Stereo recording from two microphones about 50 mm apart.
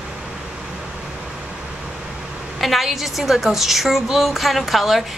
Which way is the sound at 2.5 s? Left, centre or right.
Centre.